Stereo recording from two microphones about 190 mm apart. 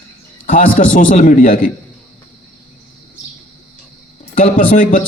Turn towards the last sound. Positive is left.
turn(degrees=45)  # may be behind; listen again after turning